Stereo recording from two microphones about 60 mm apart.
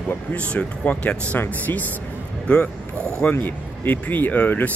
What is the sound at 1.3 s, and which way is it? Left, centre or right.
Speech, left.